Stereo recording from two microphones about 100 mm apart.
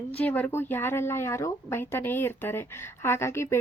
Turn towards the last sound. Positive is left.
turn(degrees=25)  # may be behind; listen again after turning